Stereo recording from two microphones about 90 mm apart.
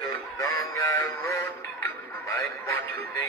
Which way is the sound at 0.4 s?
40° left (ahead or behind).